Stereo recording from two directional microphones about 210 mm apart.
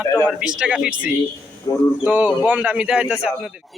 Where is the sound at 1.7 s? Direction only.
20° left (ahead or behind).